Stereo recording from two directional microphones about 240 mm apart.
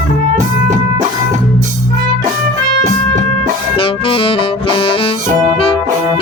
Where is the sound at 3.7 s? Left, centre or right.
Left.